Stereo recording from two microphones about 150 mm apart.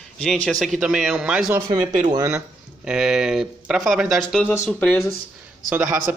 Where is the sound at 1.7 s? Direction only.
25° right (ahead or behind).